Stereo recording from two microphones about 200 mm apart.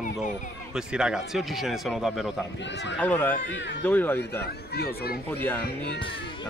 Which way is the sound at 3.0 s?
10° left (ahead or behind).